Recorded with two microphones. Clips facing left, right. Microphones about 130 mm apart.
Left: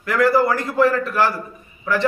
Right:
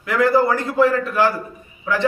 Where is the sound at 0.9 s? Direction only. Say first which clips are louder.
Even; 20° right (ahead or behind).